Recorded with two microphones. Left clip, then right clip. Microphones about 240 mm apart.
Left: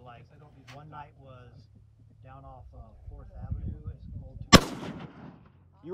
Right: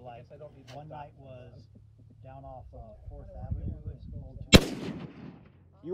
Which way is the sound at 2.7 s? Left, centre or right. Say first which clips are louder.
Right 5 dB; left.